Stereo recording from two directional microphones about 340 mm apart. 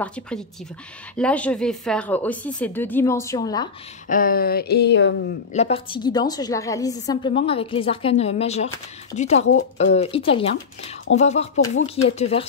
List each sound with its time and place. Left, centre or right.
0.0 s speech: centre
4.1 s speech: left
5.5 s a woman's voice: centre